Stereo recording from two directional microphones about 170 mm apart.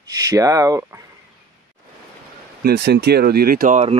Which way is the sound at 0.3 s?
20° right (ahead or behind).